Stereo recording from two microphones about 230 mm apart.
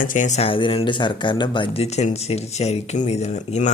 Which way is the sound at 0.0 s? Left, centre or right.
Left.